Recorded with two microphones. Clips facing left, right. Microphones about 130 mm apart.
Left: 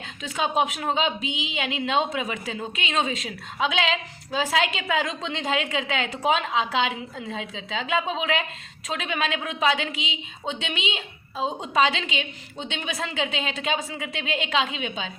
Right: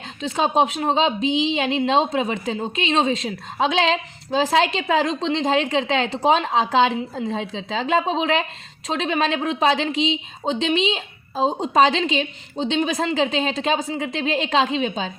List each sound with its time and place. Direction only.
0.2 s speech: 30° right (ahead or behind)